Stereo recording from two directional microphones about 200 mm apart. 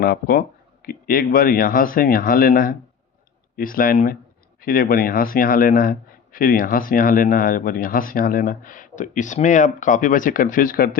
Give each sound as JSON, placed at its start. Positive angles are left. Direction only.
{"t": 0.0, "sound": "a man's voice", "side_deg": 50}